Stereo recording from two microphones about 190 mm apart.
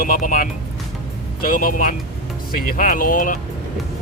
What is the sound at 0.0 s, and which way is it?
Speech, 50° left (ahead or behind).